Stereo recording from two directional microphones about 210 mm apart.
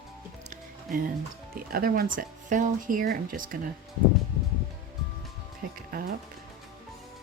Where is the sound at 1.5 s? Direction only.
45° right (ahead or behind).